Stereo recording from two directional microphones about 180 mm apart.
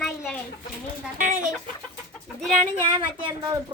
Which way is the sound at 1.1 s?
45° right (ahead or behind).